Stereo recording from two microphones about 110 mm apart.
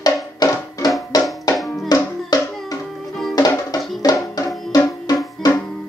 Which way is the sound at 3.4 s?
35° left (ahead or behind).